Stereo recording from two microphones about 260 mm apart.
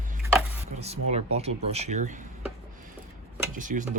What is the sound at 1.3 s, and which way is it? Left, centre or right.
Speech, right.